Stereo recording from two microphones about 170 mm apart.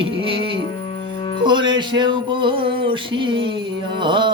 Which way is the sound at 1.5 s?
25° right (ahead or behind).